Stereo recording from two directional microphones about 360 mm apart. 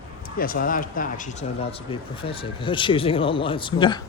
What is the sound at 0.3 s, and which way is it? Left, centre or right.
Speech, left.